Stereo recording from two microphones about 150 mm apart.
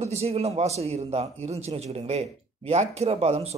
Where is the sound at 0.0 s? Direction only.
45° right (ahead or behind).